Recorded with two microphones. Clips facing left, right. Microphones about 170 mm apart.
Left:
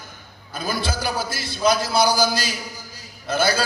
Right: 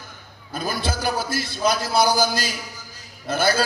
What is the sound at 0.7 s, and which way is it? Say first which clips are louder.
A man's voice: even; 50° right (ahead or behind).